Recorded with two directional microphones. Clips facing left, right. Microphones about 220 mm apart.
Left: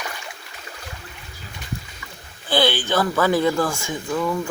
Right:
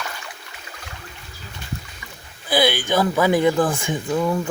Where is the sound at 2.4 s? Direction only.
10° right (ahead or behind).